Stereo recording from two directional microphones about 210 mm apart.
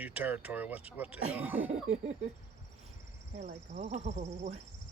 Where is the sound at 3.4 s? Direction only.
35° right (ahead or behind).